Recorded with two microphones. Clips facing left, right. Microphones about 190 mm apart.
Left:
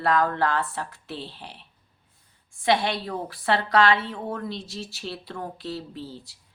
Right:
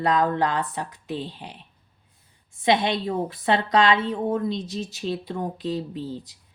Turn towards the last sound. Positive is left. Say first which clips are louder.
# right 6 dB
turn(degrees=-15)  # may be behind; listen again after turning